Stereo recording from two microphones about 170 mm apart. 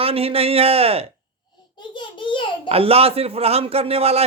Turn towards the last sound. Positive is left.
turn(degrees=-35)  # may be behind; listen again after turning